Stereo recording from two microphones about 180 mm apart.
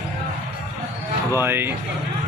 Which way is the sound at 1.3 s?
10° right (ahead or behind).